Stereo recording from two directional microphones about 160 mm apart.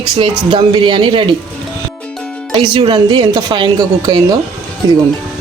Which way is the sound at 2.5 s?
30° right (ahead or behind).